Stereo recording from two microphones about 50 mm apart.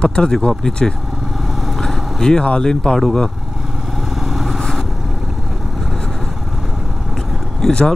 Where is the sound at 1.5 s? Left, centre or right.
Centre.